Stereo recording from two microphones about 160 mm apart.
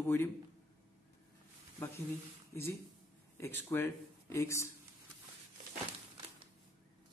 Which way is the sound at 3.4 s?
15° left (ahead or behind).